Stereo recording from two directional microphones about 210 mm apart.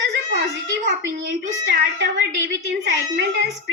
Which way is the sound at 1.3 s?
55° right (ahead or behind).